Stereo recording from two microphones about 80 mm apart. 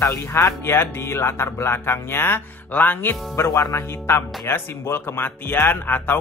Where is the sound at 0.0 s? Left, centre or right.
Left.